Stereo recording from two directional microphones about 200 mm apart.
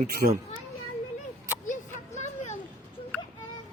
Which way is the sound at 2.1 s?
35° left (ahead or behind).